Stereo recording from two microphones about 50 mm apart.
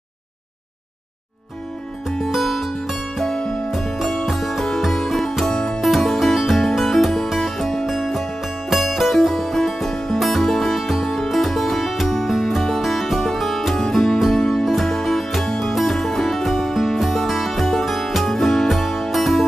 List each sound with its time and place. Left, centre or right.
2.0 s music: centre
3.2 s music: centre